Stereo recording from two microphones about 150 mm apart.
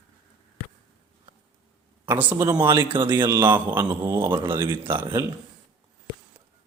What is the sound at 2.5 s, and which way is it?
Speech, 25° right (ahead or behind).